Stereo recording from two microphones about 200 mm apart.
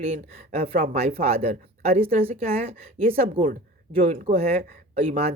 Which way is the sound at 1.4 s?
50° right (ahead or behind).